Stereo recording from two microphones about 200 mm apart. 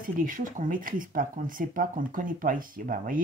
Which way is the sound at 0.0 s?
45° right (ahead or behind).